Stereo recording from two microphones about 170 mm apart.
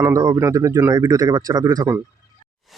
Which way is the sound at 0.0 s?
20° right (ahead or behind).